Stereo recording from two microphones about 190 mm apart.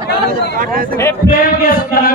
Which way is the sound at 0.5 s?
45° right (ahead or behind).